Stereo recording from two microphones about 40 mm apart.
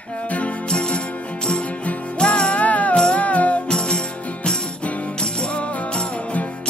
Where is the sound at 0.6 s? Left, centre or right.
Left.